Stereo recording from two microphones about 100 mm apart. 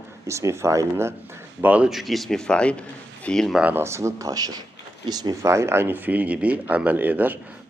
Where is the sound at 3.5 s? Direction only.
15° right (ahead or behind).